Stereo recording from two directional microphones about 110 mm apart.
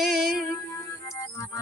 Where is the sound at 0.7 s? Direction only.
30° left (ahead or behind).